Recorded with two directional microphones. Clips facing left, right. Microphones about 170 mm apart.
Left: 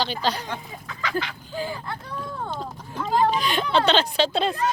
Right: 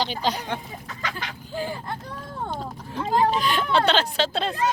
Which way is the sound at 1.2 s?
45° right (ahead or behind).